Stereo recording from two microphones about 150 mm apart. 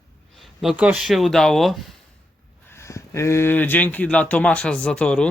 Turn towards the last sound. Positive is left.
turn(degrees=5)  # may be behind; listen again after turning